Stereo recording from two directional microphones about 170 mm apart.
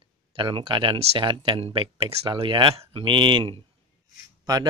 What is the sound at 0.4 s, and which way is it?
Speech, 30° right (ahead or behind).